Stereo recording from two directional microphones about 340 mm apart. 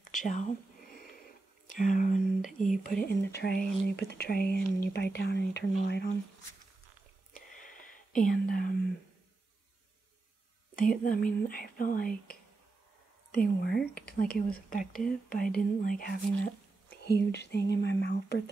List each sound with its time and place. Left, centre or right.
0.0 s a sound: left
1.7 s speech: left
7.3 s whispering: left
10.8 s speech: left
14.9 s speech: centre
15.2 s speech: left